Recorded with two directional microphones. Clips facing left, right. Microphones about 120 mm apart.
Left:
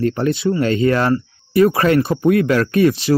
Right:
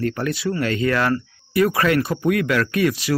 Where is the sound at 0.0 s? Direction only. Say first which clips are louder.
Left 5 dB; 25° left (ahead or behind).